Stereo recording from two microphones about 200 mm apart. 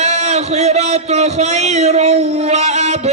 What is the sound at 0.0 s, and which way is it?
A man's voice, 35° right (ahead or behind).